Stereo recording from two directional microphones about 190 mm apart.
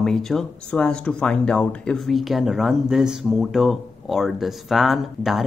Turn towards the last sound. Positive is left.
turn(degrees=0)  # may be behind; listen again after turning